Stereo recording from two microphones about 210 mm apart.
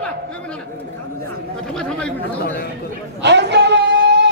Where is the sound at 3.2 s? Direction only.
55° right (ahead or behind).